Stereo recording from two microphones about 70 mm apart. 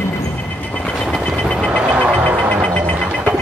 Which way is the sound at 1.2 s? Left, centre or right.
Centre.